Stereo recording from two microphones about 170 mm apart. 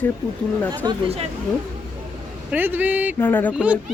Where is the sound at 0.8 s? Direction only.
30° right (ahead or behind).